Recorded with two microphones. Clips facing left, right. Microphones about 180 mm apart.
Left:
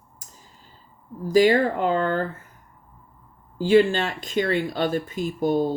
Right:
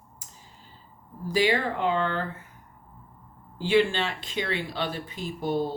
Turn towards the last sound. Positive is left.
turn(degrees=45)  # may be behind; listen again after turning